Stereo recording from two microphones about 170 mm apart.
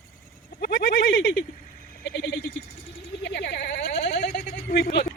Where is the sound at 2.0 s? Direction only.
90° left.